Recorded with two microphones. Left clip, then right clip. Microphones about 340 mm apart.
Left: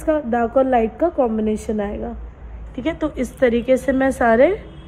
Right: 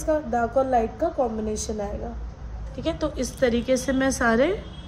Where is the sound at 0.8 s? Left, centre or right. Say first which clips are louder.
Left 5 dB; left.